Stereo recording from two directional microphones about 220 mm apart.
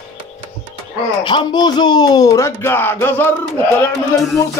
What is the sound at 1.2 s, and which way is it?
Speech, 20° left (ahead or behind).